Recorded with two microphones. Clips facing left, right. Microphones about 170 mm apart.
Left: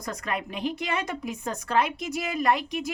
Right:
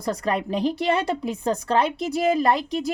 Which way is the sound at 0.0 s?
35° right (ahead or behind).